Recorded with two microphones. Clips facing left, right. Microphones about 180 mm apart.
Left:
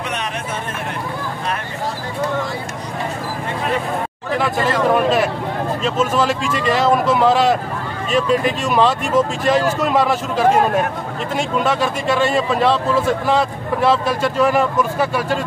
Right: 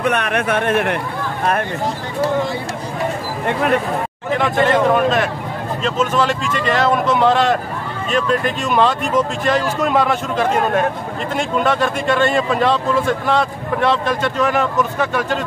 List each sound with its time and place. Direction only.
0.0 s speech: 60° right (ahead or behind)
4.6 s speech: 5° left (ahead or behind)